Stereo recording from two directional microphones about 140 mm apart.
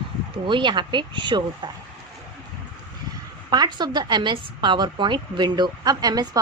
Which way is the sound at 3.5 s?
30° right (ahead or behind).